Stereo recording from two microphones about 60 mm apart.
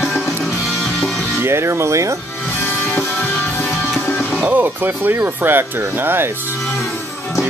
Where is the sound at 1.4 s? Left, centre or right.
Right.